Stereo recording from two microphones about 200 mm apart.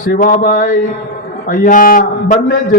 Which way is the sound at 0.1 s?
40° left (ahead or behind).